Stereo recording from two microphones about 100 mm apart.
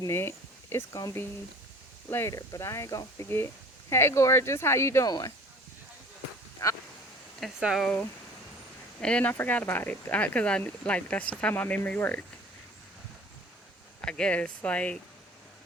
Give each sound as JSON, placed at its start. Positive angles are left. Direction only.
{"t": 0.1, "sound": "speech", "side_deg": 25}
{"t": 2.0, "sound": "speech", "side_deg": 20}
{"t": 5.0, "sound": "speech", "side_deg": 40}
{"t": 6.6, "sound": "speech", "side_deg": 30}
{"t": 7.6, "sound": "speech", "side_deg": -5}
{"t": 9.0, "sound": "speech", "side_deg": 10}
{"t": 14.0, "sound": "speech", "side_deg": 10}